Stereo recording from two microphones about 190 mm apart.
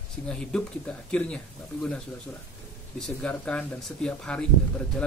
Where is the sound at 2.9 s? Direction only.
5° left (ahead or behind).